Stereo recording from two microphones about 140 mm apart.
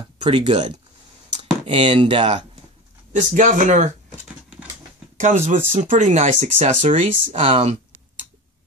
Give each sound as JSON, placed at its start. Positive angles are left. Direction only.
{"t": 0.0, "sound": "speech", "side_deg": -35}
{"t": 3.1, "sound": "speech", "side_deg": -60}
{"t": 5.1, "sound": "speech", "side_deg": -60}
{"t": 7.3, "sound": "speech", "side_deg": -40}